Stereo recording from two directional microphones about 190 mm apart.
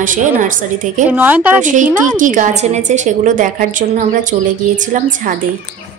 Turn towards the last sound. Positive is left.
turn(degrees=-45)  # may be behind; listen again after turning